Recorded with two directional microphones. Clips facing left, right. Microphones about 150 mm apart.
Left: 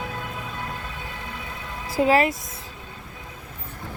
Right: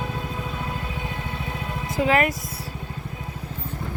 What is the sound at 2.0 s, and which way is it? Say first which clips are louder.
Speech: left 2 dB; 30° left (ahead or behind).